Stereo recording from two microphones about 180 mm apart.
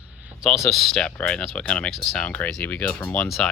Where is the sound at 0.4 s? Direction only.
Centre (ahead or behind).